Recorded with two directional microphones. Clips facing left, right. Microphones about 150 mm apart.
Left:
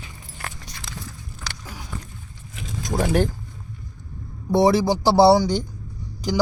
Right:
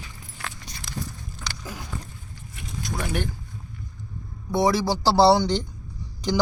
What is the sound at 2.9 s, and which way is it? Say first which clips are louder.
Speech: left 8 dB; 35° left (ahead or behind).